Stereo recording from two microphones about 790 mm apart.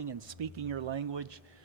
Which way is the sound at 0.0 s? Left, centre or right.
Right.